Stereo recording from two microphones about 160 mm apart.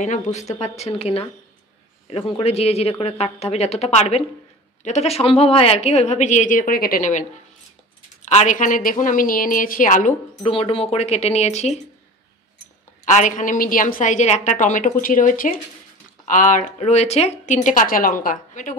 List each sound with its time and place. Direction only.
0.0 s a woman's voice: 50° left (ahead or behind)
8.3 s a woman's voice: 50° left (ahead or behind)
10.4 s a woman's voice: 35° left (ahead or behind)
13.0 s speech: 50° left (ahead or behind)